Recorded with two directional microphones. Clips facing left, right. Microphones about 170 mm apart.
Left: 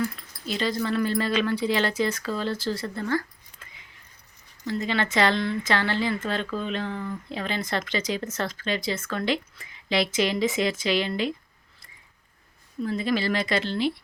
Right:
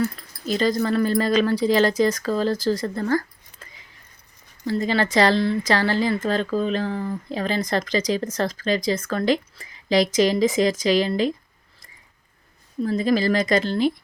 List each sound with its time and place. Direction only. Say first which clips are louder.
0.0 s speech: right 4 dB; 40° right (ahead or behind)
12.8 s speech: right 5 dB; 40° right (ahead or behind)